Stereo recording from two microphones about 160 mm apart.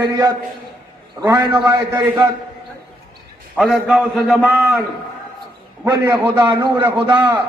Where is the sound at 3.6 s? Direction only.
Centre (ahead or behind).